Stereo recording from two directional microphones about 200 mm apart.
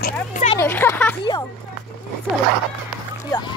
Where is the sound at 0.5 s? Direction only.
10° left (ahead or behind).